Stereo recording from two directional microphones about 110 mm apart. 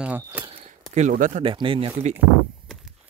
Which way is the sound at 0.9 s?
90° right.